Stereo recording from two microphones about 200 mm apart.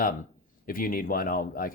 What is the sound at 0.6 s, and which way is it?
Speech, 45° left (ahead or behind).